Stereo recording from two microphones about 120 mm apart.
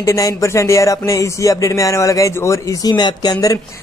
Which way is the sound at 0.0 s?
25° left (ahead or behind).